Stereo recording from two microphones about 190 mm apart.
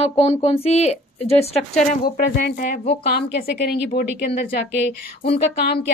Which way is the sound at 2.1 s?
45° left (ahead or behind).